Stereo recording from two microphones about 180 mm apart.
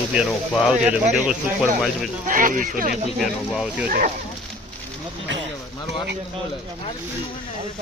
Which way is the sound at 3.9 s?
50° right (ahead or behind).